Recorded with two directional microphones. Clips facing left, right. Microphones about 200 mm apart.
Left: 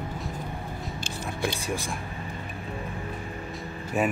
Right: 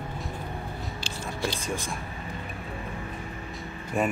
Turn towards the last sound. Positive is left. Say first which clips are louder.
# left 1 dB
turn(degrees=5)  # may be behind; listen again after turning